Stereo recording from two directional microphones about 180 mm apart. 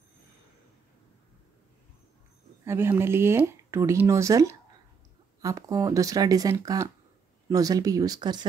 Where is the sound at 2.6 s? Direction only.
15° right (ahead or behind).